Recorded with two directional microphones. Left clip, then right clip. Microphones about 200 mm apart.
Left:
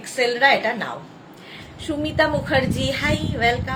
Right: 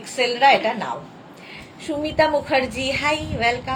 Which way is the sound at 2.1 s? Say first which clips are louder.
Right 1 dB; 20° left (ahead or behind).